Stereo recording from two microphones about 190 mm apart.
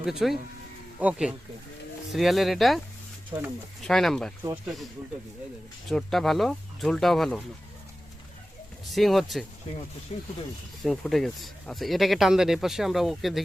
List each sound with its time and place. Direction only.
0.0 s speech: centre (ahead or behind)
5.9 s speech: centre (ahead or behind)
8.9 s speech: centre (ahead or behind)
10.1 s speech: 30° left (ahead or behind)
10.8 s speech: centre (ahead or behind)